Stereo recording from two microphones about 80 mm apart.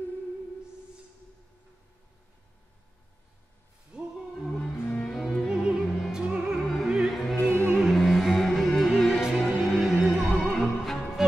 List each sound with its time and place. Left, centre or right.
3.9 s music: centre
4.5 s music: centre
5.1 s music: centre
6.2 s opera: centre
6.6 s opera: centre
7.4 s music: right
7.7 s music: centre